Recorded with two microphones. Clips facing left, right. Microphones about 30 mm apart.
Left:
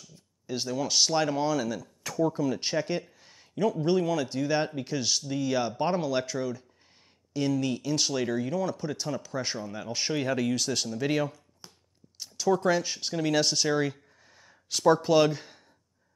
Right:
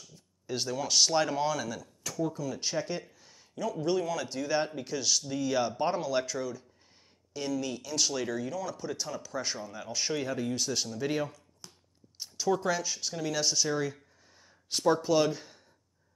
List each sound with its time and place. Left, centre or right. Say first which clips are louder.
0.5 s speech: left 2 dB; centre
2.3 s speech: left 5 dB; left
3.8 s speech: left 1 dB; centre
7.3 s speech: left 5 dB; left
10.3 s speech: left 5 dB; left
10.7 s speech: left 3 dB; left
11.6 s a sound: left 1 dB; centre
12.6 s speech: left 5 dB; left